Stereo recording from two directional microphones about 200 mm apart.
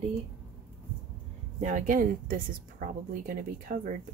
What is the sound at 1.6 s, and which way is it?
A woman's voice, 40° right (ahead or behind).